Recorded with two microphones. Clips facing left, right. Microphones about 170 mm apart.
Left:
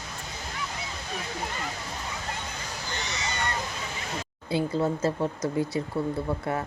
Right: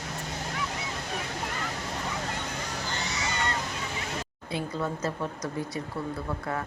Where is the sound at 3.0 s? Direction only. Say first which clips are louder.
Left 1 dB; 20° left (ahead or behind).